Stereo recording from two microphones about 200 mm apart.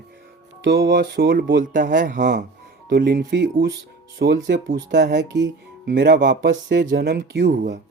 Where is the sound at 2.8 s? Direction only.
50° right (ahead or behind).